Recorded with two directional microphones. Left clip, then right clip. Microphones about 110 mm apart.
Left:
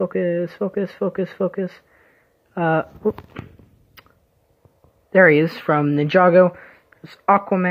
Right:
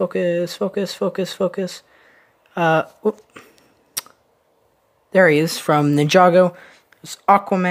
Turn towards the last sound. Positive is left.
turn(degrees=-35)  # may be behind; listen again after turning